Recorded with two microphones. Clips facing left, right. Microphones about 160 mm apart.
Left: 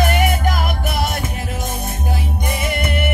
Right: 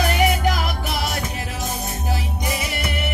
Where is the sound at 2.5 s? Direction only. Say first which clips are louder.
Left 5 dB; 55° left (ahead or behind).